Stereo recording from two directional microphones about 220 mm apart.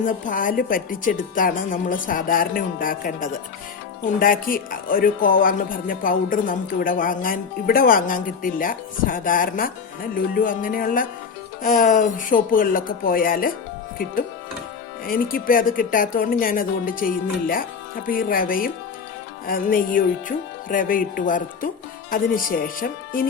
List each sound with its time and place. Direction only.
0.0 s speech: 35° left (ahead or behind)
15.0 s speech: 40° left (ahead or behind)